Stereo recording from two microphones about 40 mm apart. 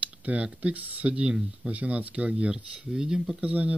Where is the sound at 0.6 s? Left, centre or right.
Right.